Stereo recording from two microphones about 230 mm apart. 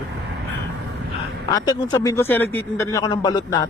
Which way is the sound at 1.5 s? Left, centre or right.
Centre.